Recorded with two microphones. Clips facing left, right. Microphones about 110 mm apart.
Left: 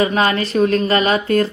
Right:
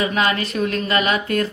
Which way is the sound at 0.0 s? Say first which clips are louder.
Left 4 dB; 35° left (ahead or behind).